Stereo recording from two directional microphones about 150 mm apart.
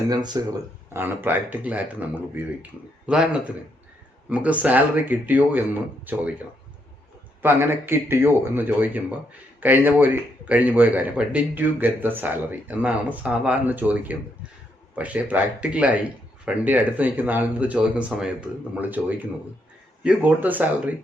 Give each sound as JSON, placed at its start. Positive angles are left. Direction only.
{"t": 0.4, "sound": "speech", "side_deg": -25}
{"t": 0.9, "sound": "speech", "side_deg": -15}
{"t": 7.4, "sound": "speech", "side_deg": -15}